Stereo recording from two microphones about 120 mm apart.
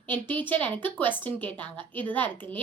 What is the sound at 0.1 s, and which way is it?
A woman's voice, 15° left (ahead or behind).